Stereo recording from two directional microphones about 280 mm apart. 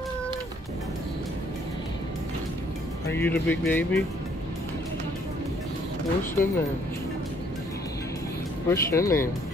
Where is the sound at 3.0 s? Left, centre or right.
Centre.